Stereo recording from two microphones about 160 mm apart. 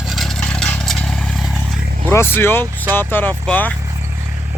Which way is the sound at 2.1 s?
15° left (ahead or behind).